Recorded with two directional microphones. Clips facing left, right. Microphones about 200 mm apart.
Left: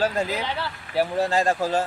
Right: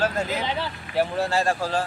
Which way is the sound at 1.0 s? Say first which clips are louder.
Left 1 dB; 15° left (ahead or behind).